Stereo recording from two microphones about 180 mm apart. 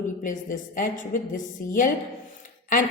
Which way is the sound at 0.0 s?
45° left (ahead or behind).